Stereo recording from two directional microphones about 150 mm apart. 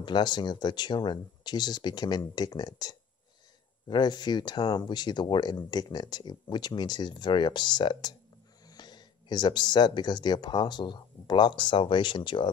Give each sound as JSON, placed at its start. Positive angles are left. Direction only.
{"t": 0.0, "sound": "speech", "side_deg": 30}